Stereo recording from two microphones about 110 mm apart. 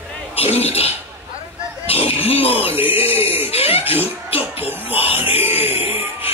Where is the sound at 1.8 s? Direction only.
65° left (ahead or behind).